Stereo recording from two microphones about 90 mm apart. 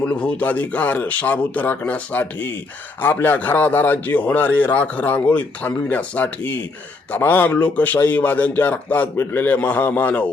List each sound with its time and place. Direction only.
0.0 s a man's voice: 15° left (ahead or behind)